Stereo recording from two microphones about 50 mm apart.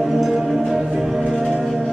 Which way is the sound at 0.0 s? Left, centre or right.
Centre.